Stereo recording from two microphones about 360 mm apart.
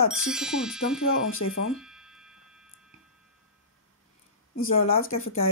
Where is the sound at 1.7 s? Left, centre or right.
Centre.